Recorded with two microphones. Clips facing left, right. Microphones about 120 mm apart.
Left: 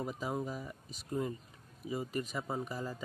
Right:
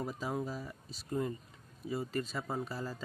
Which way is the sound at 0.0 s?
15° left (ahead or behind).